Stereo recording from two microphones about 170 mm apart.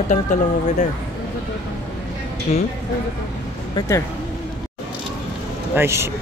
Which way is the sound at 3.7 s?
15° left (ahead or behind).